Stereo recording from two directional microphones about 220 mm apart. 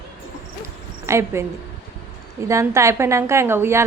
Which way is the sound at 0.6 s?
10° right (ahead or behind).